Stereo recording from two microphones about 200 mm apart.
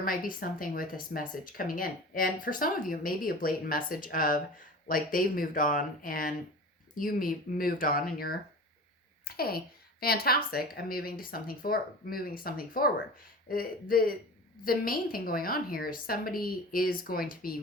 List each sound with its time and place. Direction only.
0.0 s speech: 45° left (ahead or behind)
9.2 s speech: 50° left (ahead or behind)